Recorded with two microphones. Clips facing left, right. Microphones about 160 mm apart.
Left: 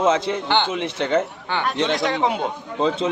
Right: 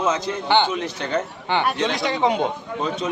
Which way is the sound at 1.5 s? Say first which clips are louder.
Right 4 dB; 20° right (ahead or behind).